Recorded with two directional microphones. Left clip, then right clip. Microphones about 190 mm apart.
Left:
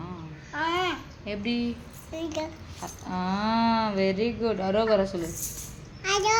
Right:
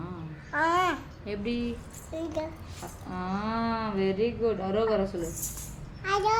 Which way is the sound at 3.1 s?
45° left (ahead or behind).